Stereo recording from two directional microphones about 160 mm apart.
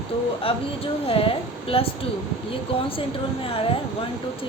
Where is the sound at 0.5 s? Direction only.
35° left (ahead or behind).